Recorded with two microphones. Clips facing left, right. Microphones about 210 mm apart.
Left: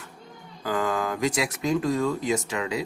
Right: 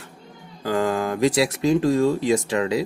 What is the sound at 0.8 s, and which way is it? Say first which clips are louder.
Speech: right 5 dB; 35° right (ahead or behind).